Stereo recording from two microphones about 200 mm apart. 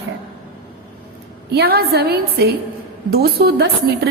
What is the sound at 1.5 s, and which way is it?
A woman's voice, 55° right (ahead or behind).